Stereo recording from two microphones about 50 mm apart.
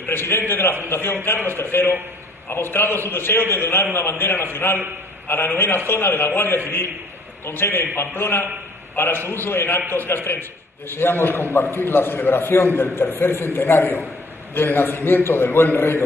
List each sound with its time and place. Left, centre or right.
0.0 s a man's voice: left